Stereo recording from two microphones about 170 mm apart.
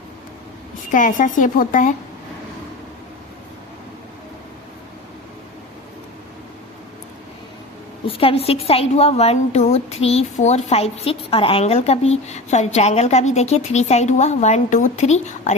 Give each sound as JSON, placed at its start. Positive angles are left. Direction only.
{"t": 0.9, "sound": "a woman's voice", "side_deg": 50}
{"t": 8.0, "sound": "a woman's voice", "side_deg": 35}